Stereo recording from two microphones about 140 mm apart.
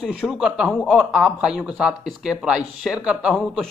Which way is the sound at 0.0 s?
Centre (ahead or behind).